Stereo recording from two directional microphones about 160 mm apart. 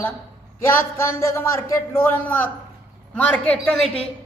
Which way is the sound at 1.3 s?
20° left (ahead or behind).